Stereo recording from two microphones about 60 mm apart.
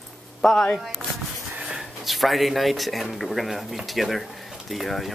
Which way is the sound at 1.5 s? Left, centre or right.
Right.